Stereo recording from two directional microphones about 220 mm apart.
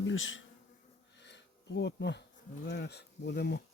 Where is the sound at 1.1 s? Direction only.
55° left (ahead or behind).